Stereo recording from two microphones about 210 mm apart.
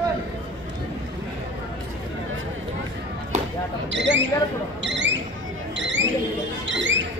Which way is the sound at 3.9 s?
60° right (ahead or behind).